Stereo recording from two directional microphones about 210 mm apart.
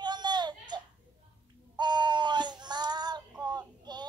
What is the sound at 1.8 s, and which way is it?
Child singing, 20° right (ahead or behind).